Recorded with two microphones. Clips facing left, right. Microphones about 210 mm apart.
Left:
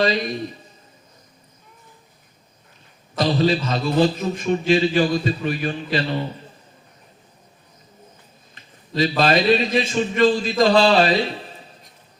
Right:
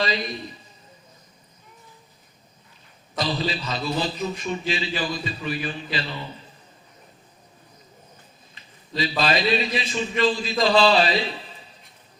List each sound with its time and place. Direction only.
0.0 s a man's voice: 45° left (ahead or behind)
3.2 s a man's voice: 45° left (ahead or behind)
9.0 s a man's voice: 45° left (ahead or behind)